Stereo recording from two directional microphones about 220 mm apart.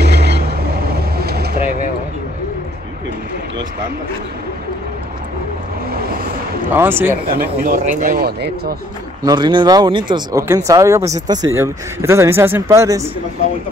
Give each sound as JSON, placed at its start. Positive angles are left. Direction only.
{"t": 0.0, "sound": "vehicle", "side_deg": -50}
{"t": 5.9, "sound": "vehicle", "side_deg": -45}
{"t": 6.7, "sound": "speech", "side_deg": -10}
{"t": 7.6, "sound": "speech", "side_deg": -35}
{"t": 9.2, "sound": "speech", "side_deg": -20}